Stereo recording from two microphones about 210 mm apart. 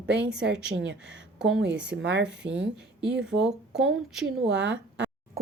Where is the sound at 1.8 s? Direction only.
55° right (ahead or behind).